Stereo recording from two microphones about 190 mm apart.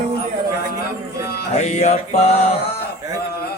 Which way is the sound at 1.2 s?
55° left (ahead or behind).